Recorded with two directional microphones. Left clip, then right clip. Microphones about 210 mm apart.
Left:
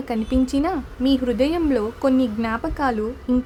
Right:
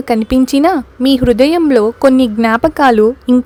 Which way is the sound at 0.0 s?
40° right (ahead or behind).